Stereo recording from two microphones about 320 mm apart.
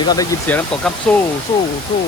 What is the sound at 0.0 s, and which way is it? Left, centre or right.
Speech, centre.